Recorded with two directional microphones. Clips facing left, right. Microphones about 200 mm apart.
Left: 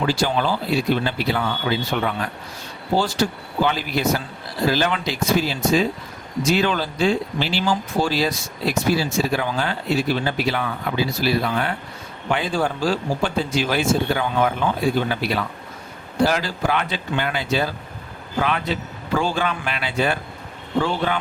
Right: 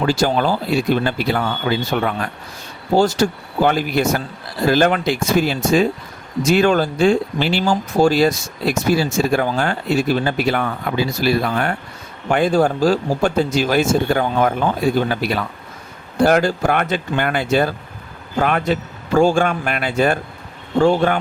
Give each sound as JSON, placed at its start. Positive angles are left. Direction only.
{"t": 0.0, "sound": "speech", "side_deg": -45}